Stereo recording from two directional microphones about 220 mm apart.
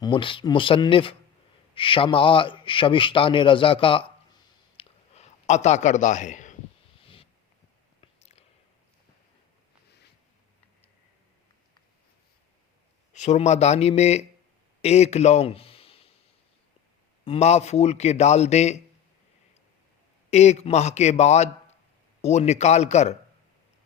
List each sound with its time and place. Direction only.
0.0 s a man's voice: 20° left (ahead or behind)
4.8 s a sound: 30° left (ahead or behind)
13.1 s a man's voice: 30° left (ahead or behind)
17.2 s a man's voice: 25° left (ahead or behind)
20.3 s a man's voice: 30° left (ahead or behind)